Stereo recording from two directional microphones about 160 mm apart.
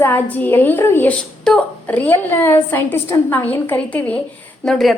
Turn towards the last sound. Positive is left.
turn(degrees=0)  # may be behind; listen again after turning